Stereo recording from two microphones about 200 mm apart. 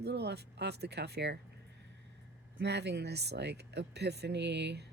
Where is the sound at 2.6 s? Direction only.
60° right (ahead or behind).